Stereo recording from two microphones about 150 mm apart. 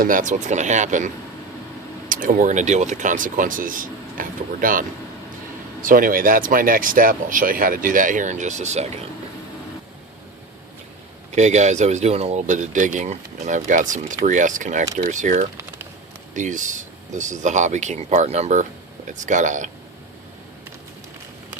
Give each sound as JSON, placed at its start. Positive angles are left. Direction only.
{"t": 0.0, "sound": "speech", "side_deg": -60}
{"t": 11.3, "sound": "speech", "side_deg": -50}